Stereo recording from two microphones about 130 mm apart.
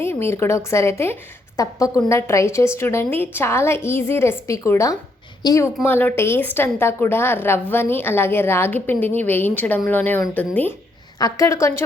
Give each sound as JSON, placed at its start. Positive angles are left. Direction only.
{"t": 0.0, "sound": "a woman's voice", "side_deg": 20}
{"t": 5.8, "sound": "a woman's voice", "side_deg": 15}
{"t": 11.2, "sound": "a woman's voice", "side_deg": 25}